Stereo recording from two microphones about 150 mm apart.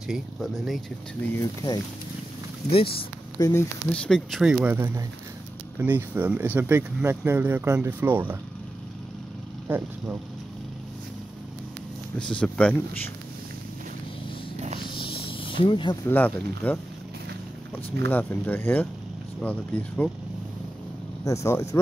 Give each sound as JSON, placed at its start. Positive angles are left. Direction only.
{"t": 0.1, "sound": "speech", "side_deg": 0}
{"t": 1.3, "sound": "speech", "side_deg": 25}
{"t": 3.3, "sound": "speech", "side_deg": 25}
{"t": 3.9, "sound": "speech", "side_deg": 5}
{"t": 9.7, "sound": "speech", "side_deg": -15}
{"t": 12.2, "sound": "speech", "side_deg": 5}
{"t": 14.8, "sound": "snake", "side_deg": 35}
{"t": 16.1, "sound": "speech", "side_deg": 10}
{"t": 18.0, "sound": "speech", "side_deg": 15}
{"t": 21.2, "sound": "speech", "side_deg": 20}